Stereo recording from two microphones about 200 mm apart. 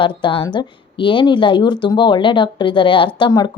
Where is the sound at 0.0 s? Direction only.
25° left (ahead or behind).